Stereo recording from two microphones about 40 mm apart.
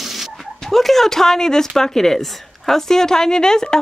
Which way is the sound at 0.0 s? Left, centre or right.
Centre.